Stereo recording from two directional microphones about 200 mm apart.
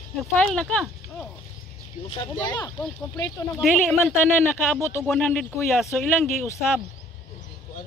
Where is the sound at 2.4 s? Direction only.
20° left (ahead or behind).